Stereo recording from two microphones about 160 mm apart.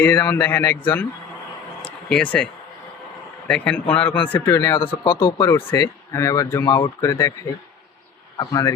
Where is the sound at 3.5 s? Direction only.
5° left (ahead or behind).